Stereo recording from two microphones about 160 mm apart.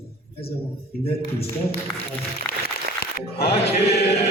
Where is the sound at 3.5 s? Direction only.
40° left (ahead or behind).